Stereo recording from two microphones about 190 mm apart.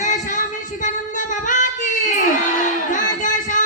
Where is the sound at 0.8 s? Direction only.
40° left (ahead or behind).